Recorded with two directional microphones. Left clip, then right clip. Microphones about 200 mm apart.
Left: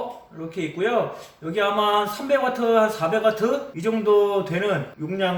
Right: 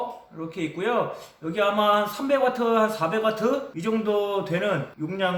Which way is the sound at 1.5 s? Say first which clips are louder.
Left 1 dB; 20° right (ahead or behind).